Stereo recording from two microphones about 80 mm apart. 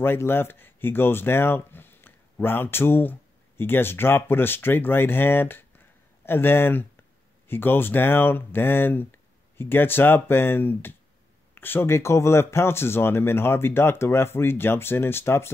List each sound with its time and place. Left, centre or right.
0.0 s speech: left